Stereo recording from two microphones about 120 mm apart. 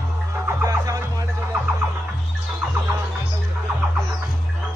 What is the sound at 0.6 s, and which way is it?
Music, 25° right (ahead or behind).